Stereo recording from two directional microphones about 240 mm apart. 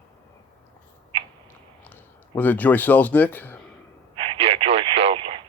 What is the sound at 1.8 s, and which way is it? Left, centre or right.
Speech, centre.